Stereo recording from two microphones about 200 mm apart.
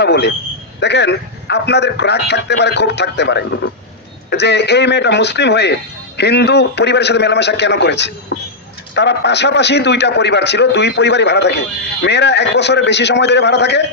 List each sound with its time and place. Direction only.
0.0 s a man's voice: 55° left (ahead or behind)